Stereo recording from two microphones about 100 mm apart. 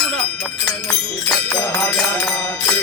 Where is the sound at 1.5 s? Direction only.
20° left (ahead or behind).